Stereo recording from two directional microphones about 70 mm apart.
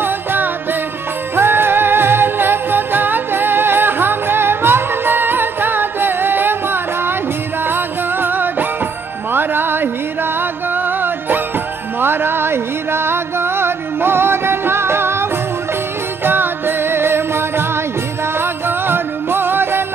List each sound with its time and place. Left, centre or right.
0.0 s music: right
16.3 s music: right